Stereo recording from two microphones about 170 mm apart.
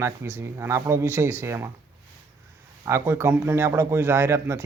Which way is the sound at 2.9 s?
15° right (ahead or behind).